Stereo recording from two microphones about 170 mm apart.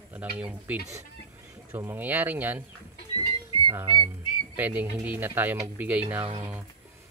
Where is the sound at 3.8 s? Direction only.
25° right (ahead or behind).